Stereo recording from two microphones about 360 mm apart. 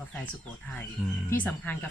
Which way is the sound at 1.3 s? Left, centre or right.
Centre.